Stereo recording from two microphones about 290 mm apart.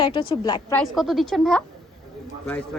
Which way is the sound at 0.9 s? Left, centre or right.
Centre.